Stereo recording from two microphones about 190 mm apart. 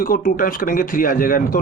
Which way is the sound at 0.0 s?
50° left (ahead or behind).